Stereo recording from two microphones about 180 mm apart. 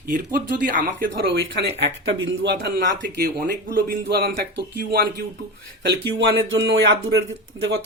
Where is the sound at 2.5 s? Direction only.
60° right (ahead or behind).